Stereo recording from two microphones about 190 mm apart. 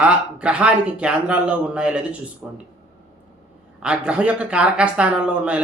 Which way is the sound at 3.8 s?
5° right (ahead or behind).